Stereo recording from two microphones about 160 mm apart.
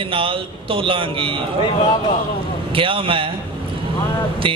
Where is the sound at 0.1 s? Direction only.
35° right (ahead or behind).